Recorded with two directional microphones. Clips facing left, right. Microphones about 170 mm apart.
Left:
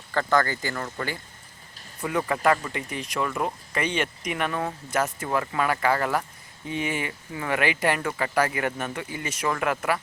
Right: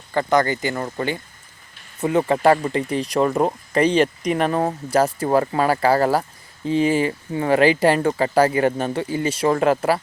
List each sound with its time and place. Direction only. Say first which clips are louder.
0.1 s speech: right 5 dB; 15° right (ahead or behind)